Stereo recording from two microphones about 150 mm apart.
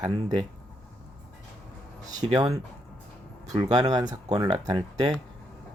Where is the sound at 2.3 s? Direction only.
25° right (ahead or behind).